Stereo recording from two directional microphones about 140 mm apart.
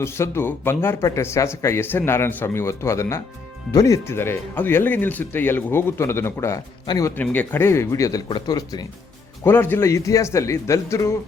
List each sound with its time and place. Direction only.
0.0 s a man's voice: 20° left (ahead or behind)
7.2 s a man's voice: 15° left (ahead or behind)
9.4 s a man's voice: 15° left (ahead or behind)